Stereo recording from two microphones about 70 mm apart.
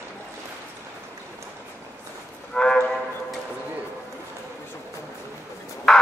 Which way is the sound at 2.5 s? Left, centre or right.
Centre.